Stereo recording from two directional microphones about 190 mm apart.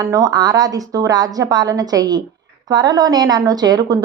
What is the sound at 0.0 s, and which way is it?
A woman's voice, 20° right (ahead or behind).